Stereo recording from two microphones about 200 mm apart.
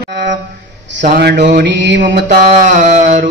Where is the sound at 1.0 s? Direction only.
55° right (ahead or behind).